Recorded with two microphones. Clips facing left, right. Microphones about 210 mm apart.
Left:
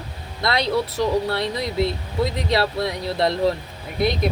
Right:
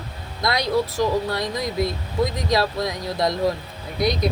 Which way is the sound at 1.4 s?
30° left (ahead or behind).